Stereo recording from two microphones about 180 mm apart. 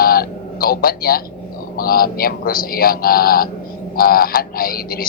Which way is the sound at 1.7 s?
55° left (ahead or behind).